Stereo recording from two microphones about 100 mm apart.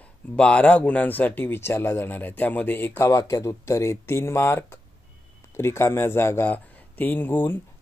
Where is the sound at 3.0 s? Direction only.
30° left (ahead or behind).